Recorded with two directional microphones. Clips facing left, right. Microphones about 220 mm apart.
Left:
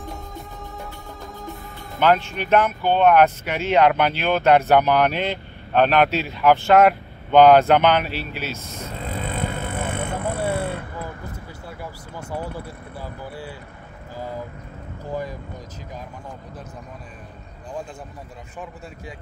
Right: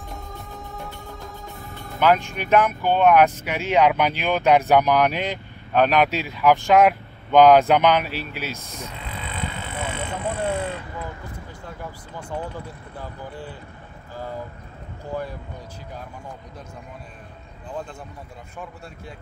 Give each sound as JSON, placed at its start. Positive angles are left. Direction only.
{"t": 0.7, "sound": "music", "side_deg": 0}
{"t": 2.0, "sound": "speech", "side_deg": -10}
{"t": 8.9, "sound": "vehicle", "side_deg": 45}
{"t": 10.3, "sound": "a sound", "side_deg": 10}
{"t": 11.8, "sound": "speech", "side_deg": 10}